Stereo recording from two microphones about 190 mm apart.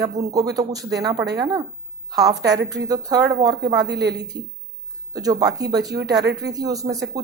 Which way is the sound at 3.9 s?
60° right (ahead or behind).